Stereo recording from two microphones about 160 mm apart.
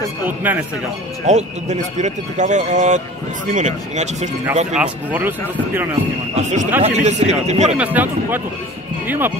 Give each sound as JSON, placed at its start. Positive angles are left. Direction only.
{"t": 0.2, "sound": "speech", "side_deg": -10}
{"t": 1.2, "sound": "speech", "side_deg": -45}
{"t": 4.7, "sound": "speech", "side_deg": -10}
{"t": 6.3, "sound": "speech", "side_deg": -50}
{"t": 7.7, "sound": "speech", "side_deg": -10}